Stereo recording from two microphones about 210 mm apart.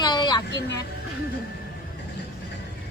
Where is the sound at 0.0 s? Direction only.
20° left (ahead or behind).